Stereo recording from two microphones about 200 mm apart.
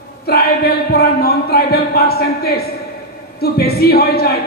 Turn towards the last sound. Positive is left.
turn(degrees=50)  # may be behind; listen again after turning